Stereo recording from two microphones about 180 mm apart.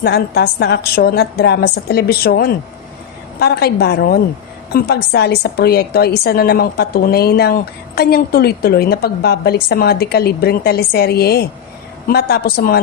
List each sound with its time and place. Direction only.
0.0 s a woman's voice: 65° left (ahead or behind)